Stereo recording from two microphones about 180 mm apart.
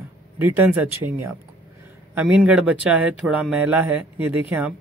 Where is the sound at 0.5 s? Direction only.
10° right (ahead or behind).